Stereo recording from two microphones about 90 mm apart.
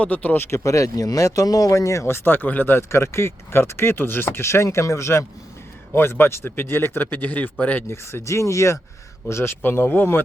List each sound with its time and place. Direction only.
0.0 s speech: 15° left (ahead or behind)
0.5 s speech: 35° left (ahead or behind); by 7.9 s 20° left (ahead or behind)
7.9 s speech: 30° left (ahead or behind)